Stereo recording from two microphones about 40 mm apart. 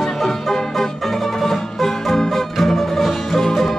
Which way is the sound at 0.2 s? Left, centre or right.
Centre.